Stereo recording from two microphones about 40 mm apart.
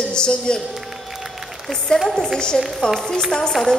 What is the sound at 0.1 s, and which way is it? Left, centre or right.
Speech, left.